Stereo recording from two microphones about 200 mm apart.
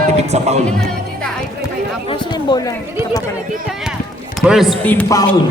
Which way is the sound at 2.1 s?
25° left (ahead or behind).